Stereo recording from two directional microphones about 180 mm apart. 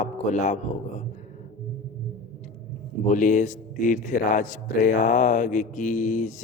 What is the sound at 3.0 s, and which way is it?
A man's voice, 45° left (ahead or behind).